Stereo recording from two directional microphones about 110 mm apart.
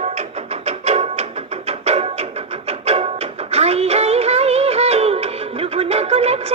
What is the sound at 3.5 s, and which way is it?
Music, 70° right (ahead or behind).